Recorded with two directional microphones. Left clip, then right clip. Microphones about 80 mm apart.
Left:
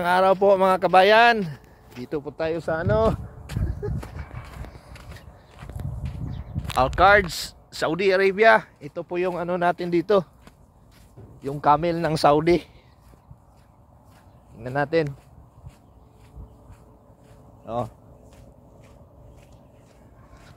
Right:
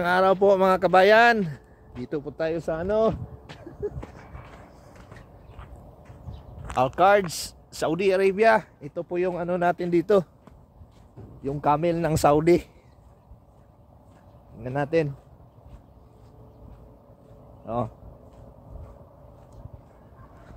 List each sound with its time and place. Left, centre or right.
0.0 s speech: centre
2.0 s speech: centre
4.1 s a sound: centre
4.6 s a sound: centre
6.8 s speech: left
9.6 s speech: centre
9.9 s speech: centre
11.4 s speech: centre
14.6 s speech: centre
17.6 s speech: right